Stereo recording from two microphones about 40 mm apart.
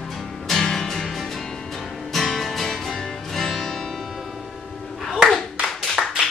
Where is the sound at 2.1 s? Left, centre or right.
Centre.